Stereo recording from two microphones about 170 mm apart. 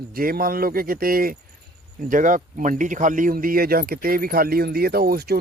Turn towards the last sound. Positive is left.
turn(degrees=-65)  # may be behind; listen again after turning